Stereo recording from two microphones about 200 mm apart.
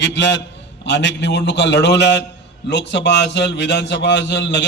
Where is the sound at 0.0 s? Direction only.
60° left (ahead or behind).